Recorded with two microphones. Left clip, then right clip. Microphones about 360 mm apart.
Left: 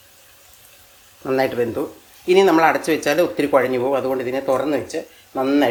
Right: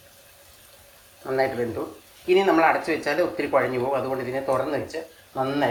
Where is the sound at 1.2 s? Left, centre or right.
Left.